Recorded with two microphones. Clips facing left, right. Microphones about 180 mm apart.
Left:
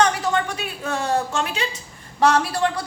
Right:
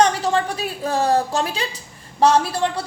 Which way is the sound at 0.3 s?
35° right (ahead or behind).